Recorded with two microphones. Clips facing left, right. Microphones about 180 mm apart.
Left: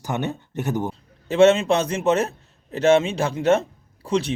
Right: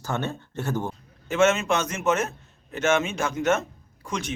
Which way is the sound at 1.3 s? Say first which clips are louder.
Left 6 dB; 30° left (ahead or behind).